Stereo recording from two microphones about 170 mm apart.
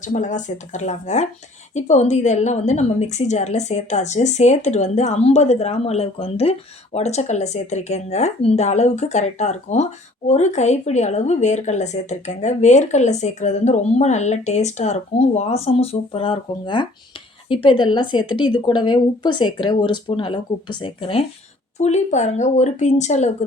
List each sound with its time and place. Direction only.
0.0 s a woman's voice: 45° left (ahead or behind)